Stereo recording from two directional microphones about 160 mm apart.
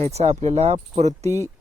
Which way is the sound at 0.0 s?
40° right (ahead or behind).